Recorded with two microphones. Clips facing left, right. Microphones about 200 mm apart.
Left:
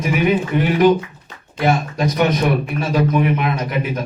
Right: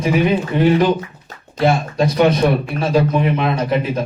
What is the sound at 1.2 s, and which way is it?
A man's voice, 30° right (ahead or behind).